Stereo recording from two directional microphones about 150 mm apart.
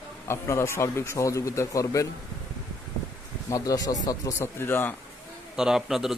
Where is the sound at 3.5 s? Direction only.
25° left (ahead or behind).